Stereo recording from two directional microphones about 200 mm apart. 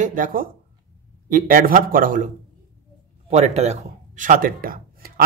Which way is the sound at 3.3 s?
35° right (ahead or behind).